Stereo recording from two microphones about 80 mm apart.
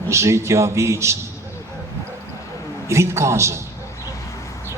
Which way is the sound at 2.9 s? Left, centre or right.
Right.